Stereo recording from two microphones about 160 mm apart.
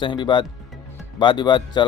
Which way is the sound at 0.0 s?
30° left (ahead or behind).